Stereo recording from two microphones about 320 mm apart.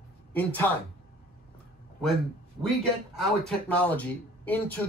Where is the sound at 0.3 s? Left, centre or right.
Centre.